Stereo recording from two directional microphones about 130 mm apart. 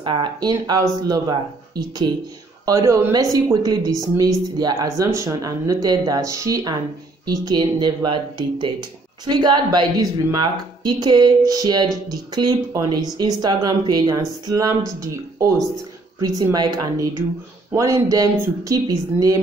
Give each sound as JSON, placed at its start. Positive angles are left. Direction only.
{"t": 0.0, "sound": "speech", "side_deg": -40}
{"t": 16.2, "sound": "speech", "side_deg": -30}